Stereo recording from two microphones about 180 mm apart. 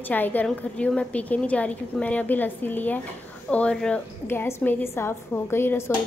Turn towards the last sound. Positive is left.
turn(degrees=15)  # may be behind; listen again after turning